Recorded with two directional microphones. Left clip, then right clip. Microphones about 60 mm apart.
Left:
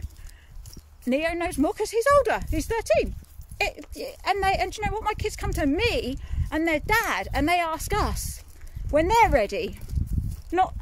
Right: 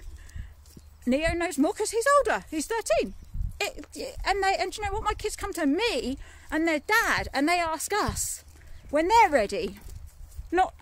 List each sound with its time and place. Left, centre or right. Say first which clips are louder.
1.3 s speech: left 1 dB; right
3.9 s speech: left 2 dB; right
4.6 s speech: left 2 dB; centre
5.4 s speech: left 2 dB; centre
5.7 s speech: left 2 dB; right
6.5 s speech: left 1 dB; right
7.4 s speech: left 4 dB; right
8.1 s speech: right 2 dB; right
9.0 s speech: even; right
9.3 s speech: left 2 dB; right
10.5 s speech: left 1 dB; right